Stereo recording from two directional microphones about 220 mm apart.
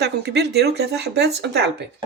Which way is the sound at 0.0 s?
50° right (ahead or behind).